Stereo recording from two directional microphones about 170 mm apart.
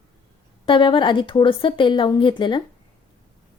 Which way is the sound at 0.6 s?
30° left (ahead or behind).